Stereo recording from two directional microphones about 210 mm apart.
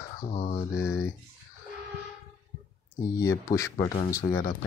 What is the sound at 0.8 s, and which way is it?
Speech, 15° left (ahead or behind).